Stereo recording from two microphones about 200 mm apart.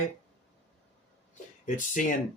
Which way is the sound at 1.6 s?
40° left (ahead or behind).